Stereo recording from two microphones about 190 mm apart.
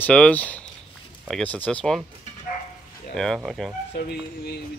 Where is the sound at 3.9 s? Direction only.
55° left (ahead or behind).